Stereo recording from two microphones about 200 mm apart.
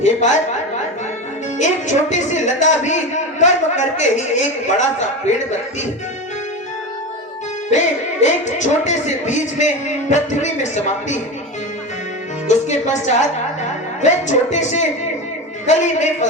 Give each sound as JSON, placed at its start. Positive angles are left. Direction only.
{"t": 0.0, "sound": "speech", "side_deg": 35}
{"t": 1.5, "sound": "speech", "side_deg": 35}
{"t": 7.7, "sound": "speech", "side_deg": 35}
{"t": 12.5, "sound": "a woman's voice", "side_deg": 35}